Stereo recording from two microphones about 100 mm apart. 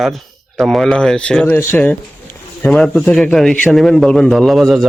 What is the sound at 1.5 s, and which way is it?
Speech, 25° left (ahead or behind).